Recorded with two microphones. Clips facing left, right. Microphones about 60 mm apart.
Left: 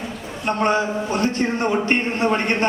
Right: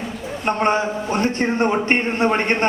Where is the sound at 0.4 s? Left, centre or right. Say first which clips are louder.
Right 1 dB; right.